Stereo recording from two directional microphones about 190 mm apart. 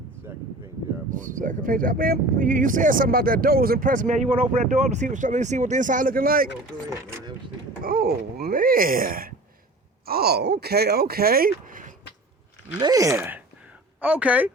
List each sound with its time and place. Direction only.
0.3 s a sound: 15° right (ahead or behind)
1.1 s speech: 45° right (ahead or behind)
7.9 s speech: 50° right (ahead or behind)
12.8 s speech: 20° right (ahead or behind)